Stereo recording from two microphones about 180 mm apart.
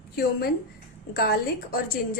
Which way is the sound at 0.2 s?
60° left (ahead or behind).